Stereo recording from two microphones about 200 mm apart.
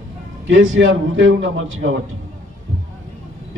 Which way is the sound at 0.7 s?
75° right (ahead or behind).